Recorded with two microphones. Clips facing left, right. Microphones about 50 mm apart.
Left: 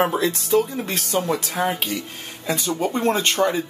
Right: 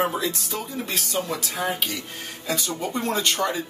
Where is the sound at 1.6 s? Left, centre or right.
Left.